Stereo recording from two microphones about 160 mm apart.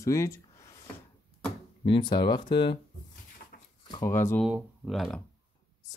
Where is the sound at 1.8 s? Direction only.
30° left (ahead or behind).